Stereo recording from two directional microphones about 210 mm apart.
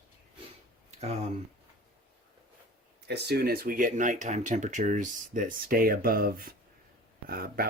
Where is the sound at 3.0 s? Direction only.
50° right (ahead or behind).